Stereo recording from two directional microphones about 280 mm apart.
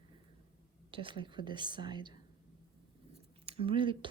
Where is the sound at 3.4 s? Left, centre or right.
Centre.